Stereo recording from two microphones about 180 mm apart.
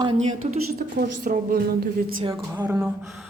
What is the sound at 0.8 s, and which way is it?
Speech, 55° right (ahead or behind).